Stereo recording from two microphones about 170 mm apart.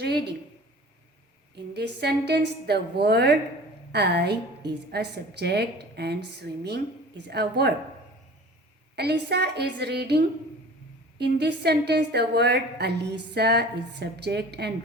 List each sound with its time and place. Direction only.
0.0 s a woman's voice: 70° right (ahead or behind)
1.5 s a woman's voice: 75° right (ahead or behind)
9.0 s a woman's voice: 75° right (ahead or behind)